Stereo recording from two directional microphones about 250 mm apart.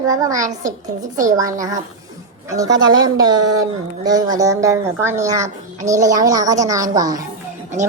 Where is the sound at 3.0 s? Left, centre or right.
Centre.